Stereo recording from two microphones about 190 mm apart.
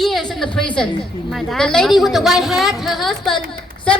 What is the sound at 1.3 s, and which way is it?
A woman's voice, centre (ahead or behind).